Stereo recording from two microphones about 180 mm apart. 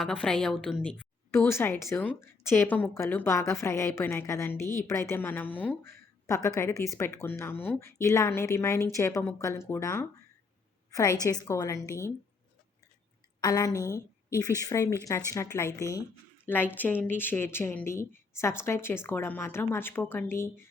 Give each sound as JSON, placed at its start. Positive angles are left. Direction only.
{"t": 0.0, "sound": "a woman's voice", "side_deg": 5}
{"t": 13.4, "sound": "a woman's voice", "side_deg": 20}